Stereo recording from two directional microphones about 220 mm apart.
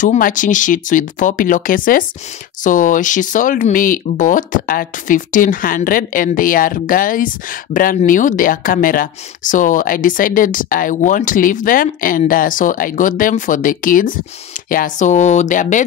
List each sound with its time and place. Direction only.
0.0 s speech: 35° left (ahead or behind)